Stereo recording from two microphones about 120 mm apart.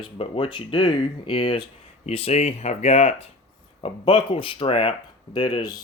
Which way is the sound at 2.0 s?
60° left (ahead or behind).